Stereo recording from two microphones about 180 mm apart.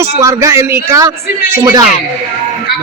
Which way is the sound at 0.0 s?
15° right (ahead or behind).